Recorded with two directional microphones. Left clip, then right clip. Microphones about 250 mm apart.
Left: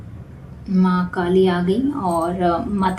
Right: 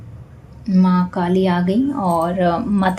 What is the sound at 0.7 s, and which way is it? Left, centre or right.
Speech, right.